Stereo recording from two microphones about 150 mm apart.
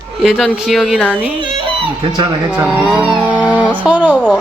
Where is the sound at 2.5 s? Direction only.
10° right (ahead or behind).